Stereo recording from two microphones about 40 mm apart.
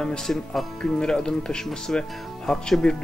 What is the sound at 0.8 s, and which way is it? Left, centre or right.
Speech, centre.